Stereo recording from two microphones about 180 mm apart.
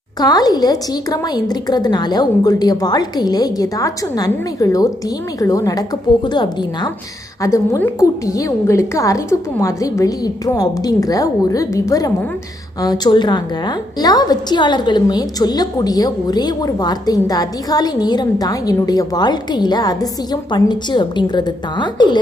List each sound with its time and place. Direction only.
0.2 s a woman's voice: 20° left (ahead or behind)